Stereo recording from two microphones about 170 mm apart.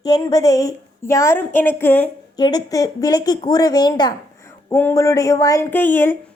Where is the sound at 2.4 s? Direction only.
25° left (ahead or behind).